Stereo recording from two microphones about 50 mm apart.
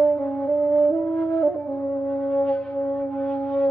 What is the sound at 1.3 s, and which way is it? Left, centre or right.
Wind instrument, centre.